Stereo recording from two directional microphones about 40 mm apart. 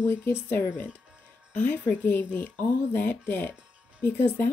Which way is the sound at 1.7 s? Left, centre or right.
Left.